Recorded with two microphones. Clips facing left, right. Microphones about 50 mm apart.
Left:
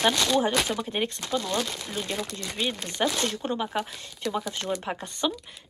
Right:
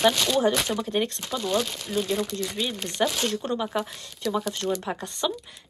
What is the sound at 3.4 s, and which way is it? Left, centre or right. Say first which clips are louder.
Speech: right 1 dB; centre.